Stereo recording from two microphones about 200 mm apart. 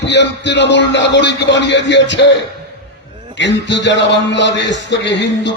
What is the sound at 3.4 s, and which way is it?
A man's voice, 65° left (ahead or behind).